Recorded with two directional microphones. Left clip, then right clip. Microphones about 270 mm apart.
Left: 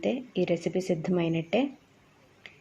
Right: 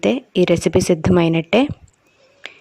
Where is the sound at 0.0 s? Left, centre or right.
Right.